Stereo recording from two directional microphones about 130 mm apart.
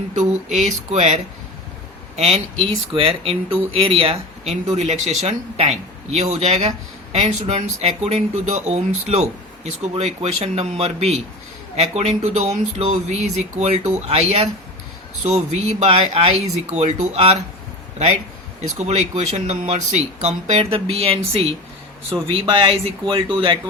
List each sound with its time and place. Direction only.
0.2 s speech: 60° right (ahead or behind)
2.1 s speech: 50° right (ahead or behind)
18.8 s speech: 55° right (ahead or behind)